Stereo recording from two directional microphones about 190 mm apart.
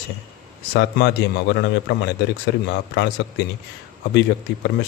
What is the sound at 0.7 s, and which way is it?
A man's voice, 65° left (ahead or behind).